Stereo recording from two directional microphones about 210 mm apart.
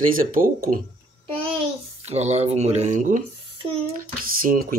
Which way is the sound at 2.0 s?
30° right (ahead or behind).